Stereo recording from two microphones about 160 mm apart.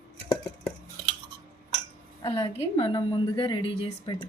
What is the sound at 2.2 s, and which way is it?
A woman's voice, 35° left (ahead or behind).